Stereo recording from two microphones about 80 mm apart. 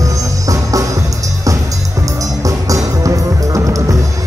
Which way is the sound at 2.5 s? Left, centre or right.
Right.